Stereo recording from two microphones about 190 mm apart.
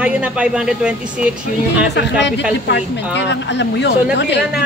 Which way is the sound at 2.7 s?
70° left (ahead or behind).